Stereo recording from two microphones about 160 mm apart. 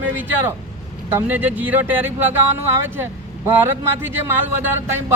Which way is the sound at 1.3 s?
10° right (ahead or behind).